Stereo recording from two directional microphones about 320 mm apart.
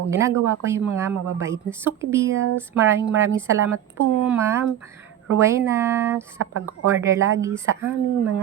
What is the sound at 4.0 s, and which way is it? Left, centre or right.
Speech, right.